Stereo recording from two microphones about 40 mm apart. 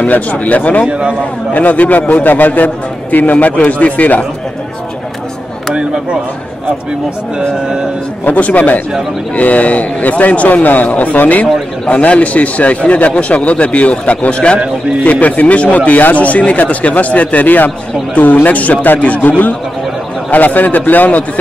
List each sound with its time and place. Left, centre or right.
0.0 s a man's voice: left
0.8 s a man's voice: right
1.5 s a man's voice: left
8.3 s a man's voice: left
15.0 s a man's voice: left